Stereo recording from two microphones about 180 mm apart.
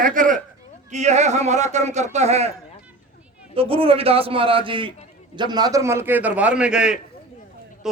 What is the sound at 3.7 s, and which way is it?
A man's voice, 30° right (ahead or behind).